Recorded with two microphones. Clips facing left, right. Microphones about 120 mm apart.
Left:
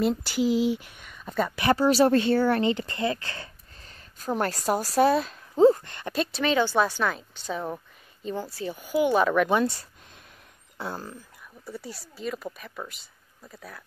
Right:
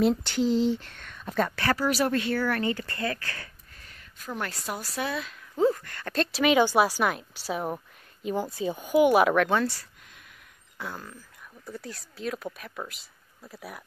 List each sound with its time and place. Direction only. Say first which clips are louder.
0.0 s speech: right 1 dB; 5° left (ahead or behind)
1.6 s speech: left 8 dB; 25° left (ahead or behind)
6.1 s speech: right 2 dB; 5° right (ahead or behind)
9.5 s speech: left 2 dB; 20° left (ahead or behind)
10.8 s speech: left 4 dB; 30° left (ahead or behind)
11.6 s speech: left 1 dB; 5° left (ahead or behind); by 13.8 s 10° right (ahead or behind)